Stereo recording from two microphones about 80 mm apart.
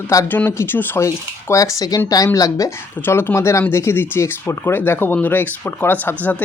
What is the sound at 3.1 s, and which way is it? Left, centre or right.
Speech, left.